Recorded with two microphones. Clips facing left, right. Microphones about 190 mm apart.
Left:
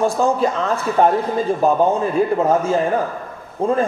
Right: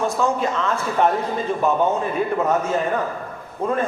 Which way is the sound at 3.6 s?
30° left (ahead or behind).